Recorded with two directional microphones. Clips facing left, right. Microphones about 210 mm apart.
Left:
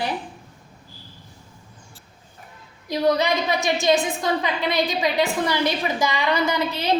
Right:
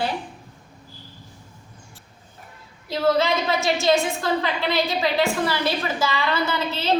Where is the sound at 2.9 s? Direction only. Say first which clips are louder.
Even; 15° left (ahead or behind).